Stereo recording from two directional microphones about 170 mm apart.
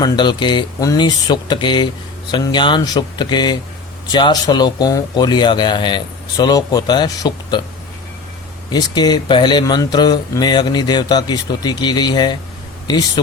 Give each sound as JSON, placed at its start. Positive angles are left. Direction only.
{"t": 0.0, "sound": "speech", "side_deg": 25}
{"t": 8.7, "sound": "speech", "side_deg": 25}